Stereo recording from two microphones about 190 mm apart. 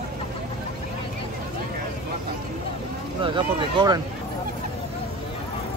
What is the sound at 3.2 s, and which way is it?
Speech, 25° right (ahead or behind).